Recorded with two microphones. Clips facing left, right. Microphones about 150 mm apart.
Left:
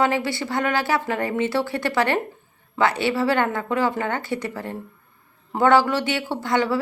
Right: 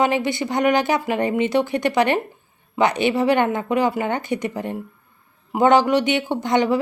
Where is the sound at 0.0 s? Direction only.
20° right (ahead or behind).